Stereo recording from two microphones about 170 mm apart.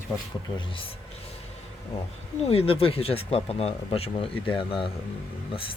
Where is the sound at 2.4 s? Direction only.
35° left (ahead or behind).